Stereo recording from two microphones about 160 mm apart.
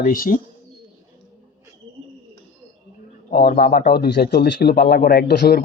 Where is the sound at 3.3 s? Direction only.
70° left (ahead or behind).